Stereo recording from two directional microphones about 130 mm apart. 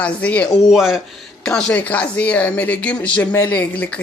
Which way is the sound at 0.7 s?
Centre (ahead or behind).